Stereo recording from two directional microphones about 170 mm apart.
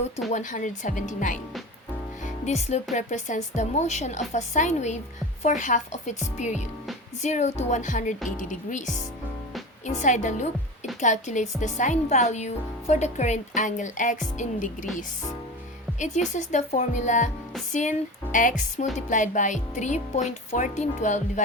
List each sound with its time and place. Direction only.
0.3 s speech: 45° left (ahead or behind)
2.2 s music: 40° left (ahead or behind)
2.9 s speech: 45° left (ahead or behind)
16.0 s speech: 45° left (ahead or behind)